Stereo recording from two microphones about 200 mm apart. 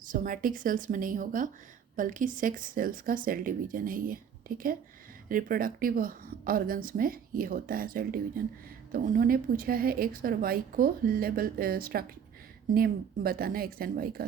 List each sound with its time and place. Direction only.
0.0 s a woman's voice: 45° right (ahead or behind)